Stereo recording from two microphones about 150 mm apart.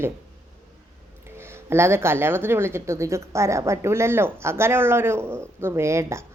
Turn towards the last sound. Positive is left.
turn(degrees=-20)  # may be behind; listen again after turning